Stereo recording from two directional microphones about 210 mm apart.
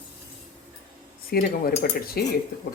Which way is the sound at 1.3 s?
45° left (ahead or behind).